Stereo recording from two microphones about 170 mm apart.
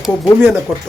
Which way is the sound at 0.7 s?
15° right (ahead or behind).